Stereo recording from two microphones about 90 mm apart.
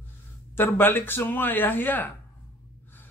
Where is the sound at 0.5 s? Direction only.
25° left (ahead or behind).